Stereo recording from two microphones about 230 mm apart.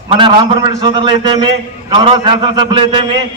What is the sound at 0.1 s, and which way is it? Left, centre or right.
A man's voice, right.